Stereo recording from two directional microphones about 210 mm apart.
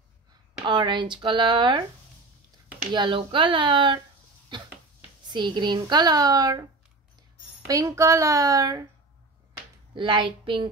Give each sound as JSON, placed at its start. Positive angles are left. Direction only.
{"t": 0.7, "sound": "a woman's voice", "side_deg": -20}
{"t": 2.9, "sound": "a woman's voice", "side_deg": -25}
{"t": 4.5, "sound": "a sound", "side_deg": -20}
{"t": 5.3, "sound": "a woman's voice", "side_deg": -20}
{"t": 7.6, "sound": "a woman's voice", "side_deg": -15}
{"t": 9.9, "sound": "a woman's voice", "side_deg": -20}